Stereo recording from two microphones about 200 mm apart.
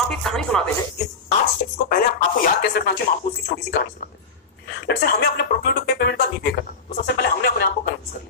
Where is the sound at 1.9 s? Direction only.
45° left (ahead or behind).